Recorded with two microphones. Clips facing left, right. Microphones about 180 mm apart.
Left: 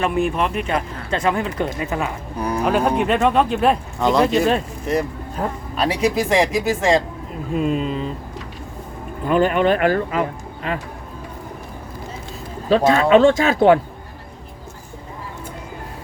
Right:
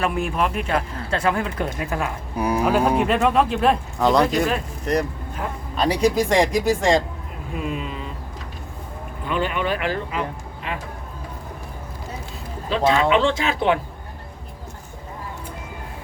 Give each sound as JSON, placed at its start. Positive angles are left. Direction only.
{"t": 0.0, "sound": "speech", "side_deg": 0}
{"t": 7.6, "sound": "speech", "side_deg": 35}
{"t": 9.2, "sound": "speech", "side_deg": 45}
{"t": 12.7, "sound": "speech", "side_deg": 45}